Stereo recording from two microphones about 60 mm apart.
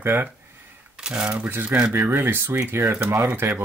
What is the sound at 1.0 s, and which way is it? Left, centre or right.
Speech, centre.